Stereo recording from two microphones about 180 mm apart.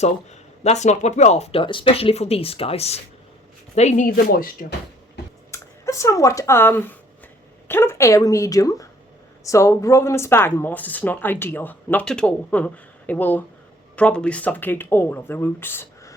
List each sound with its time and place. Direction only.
0.0 s speech: 40° left (ahead or behind)
5.5 s speech: 15° left (ahead or behind)